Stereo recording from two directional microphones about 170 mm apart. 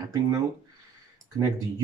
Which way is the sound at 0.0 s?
20° right (ahead or behind).